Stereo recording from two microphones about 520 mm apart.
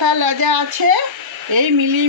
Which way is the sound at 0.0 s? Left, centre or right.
Right.